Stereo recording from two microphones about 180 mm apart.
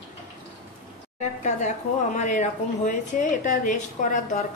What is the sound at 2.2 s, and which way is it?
Speech, 45° left (ahead or behind).